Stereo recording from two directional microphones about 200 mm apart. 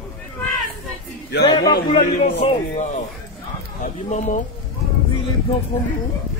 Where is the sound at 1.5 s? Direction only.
20° left (ahead or behind).